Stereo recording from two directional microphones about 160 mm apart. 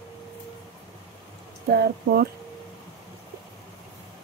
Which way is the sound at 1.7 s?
90° right.